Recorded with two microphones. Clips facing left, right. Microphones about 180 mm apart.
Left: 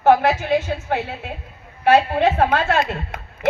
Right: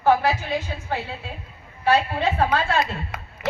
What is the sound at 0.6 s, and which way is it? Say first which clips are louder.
A woman's voice: left 5 dB; 65° left (ahead or behind).